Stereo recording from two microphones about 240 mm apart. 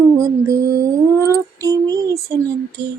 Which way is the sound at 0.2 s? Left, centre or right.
Centre.